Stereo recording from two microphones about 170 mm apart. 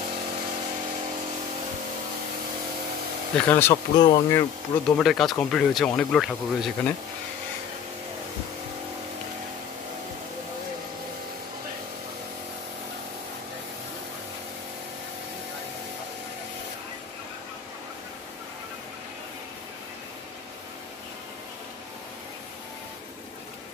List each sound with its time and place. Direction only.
3.3 s speech: 10° left (ahead or behind)
3.7 s speech: 25° left (ahead or behind)
4.8 s speech: 5° left (ahead or behind)